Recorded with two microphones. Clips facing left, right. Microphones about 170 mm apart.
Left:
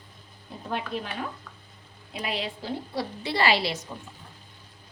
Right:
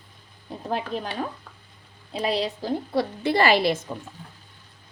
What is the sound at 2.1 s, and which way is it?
Speech, 35° right (ahead or behind).